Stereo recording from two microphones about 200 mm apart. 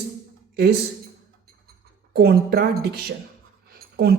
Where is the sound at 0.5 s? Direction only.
50° right (ahead or behind).